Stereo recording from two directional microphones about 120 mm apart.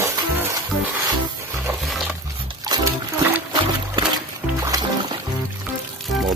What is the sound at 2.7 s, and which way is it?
Music, 35° right (ahead or behind).